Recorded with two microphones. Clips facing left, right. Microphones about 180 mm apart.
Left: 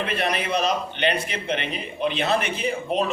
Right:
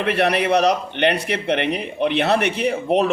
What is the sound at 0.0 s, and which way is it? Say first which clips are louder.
A man's voice: right 7 dB; 70° right (ahead or behind).